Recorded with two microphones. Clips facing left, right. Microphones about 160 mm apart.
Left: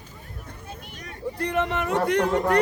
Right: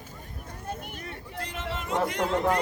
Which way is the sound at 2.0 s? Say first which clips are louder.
Left 7 dB; 65° left (ahead or behind).